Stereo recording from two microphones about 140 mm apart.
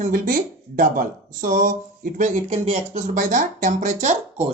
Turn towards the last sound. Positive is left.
turn(degrees=-60)  # may be behind; listen again after turning